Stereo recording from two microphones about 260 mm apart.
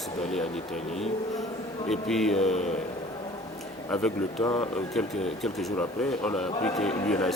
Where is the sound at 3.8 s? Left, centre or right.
Centre.